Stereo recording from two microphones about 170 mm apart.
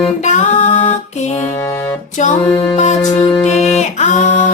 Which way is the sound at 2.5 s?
30° left (ahead or behind).